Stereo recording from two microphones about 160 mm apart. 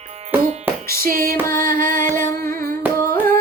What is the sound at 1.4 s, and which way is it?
Music, 15° left (ahead or behind).